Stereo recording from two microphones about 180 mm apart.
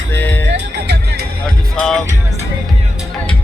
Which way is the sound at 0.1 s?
10° left (ahead or behind).